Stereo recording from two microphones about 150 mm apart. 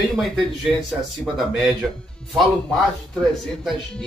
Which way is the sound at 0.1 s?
Centre (ahead or behind).